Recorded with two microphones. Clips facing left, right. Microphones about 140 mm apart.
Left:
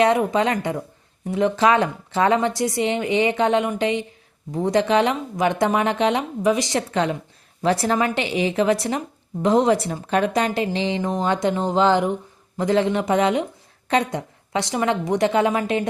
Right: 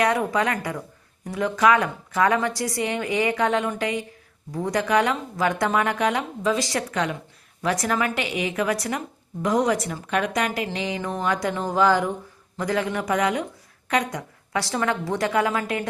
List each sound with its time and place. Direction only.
0.0 s a woman's voice: 20° left (ahead or behind)